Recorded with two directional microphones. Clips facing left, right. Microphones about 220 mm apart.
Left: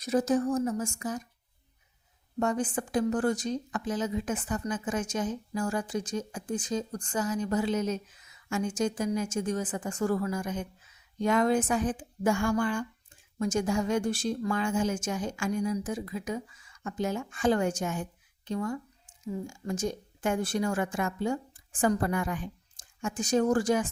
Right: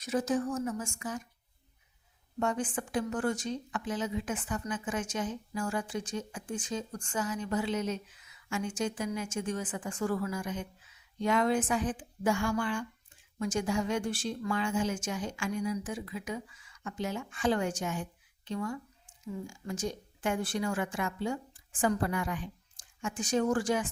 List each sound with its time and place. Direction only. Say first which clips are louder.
0.0 s a woman's voice: left 4 dB; 35° left (ahead or behind)
2.4 s a woman's voice: left 3 dB; 40° left (ahead or behind)